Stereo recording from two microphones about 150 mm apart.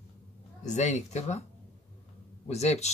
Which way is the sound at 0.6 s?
50° left (ahead or behind).